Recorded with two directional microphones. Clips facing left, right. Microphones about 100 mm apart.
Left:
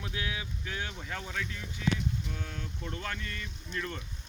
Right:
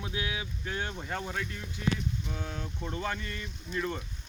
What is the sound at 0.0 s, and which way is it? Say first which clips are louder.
Speech: right 2 dB; 20° right (ahead or behind).